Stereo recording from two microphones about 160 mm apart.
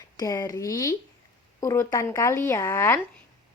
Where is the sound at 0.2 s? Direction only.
20° left (ahead or behind).